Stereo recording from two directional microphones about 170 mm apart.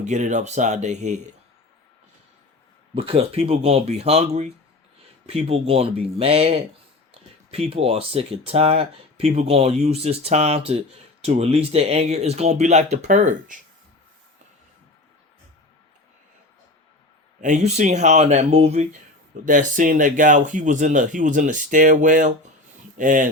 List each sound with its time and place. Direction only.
0.0 s speech: 45° right (ahead or behind)
2.9 s speech: 30° right (ahead or behind)
17.4 s speech: 40° right (ahead or behind)
19.5 s speech: 50° right (ahead or behind)